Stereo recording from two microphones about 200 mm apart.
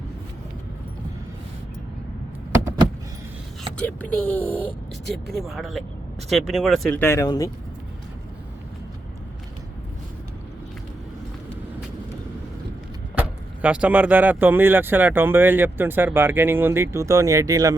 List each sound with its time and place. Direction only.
2.6 s vehicle: 15° right (ahead or behind)
3.8 s speech: 10° left (ahead or behind)
7.0 s speech: 15° left (ahead or behind)
13.1 s speech: 5° right (ahead or behind)